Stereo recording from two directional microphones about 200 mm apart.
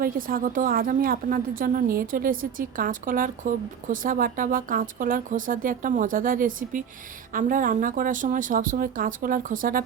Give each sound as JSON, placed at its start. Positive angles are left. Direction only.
{"t": 0.0, "sound": "a woman's voice", "side_deg": -45}